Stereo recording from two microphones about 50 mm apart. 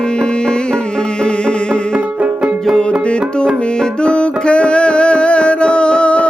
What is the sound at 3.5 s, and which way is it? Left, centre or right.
Music, centre.